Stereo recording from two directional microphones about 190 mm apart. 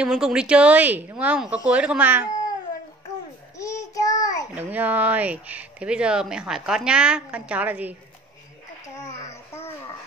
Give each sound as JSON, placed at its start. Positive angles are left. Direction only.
{"t": 0.0, "sound": "speech", "side_deg": -5}
{"t": 3.9, "sound": "child singing", "side_deg": 20}
{"t": 4.6, "sound": "speech", "side_deg": -10}
{"t": 9.1, "sound": "a sound", "side_deg": 15}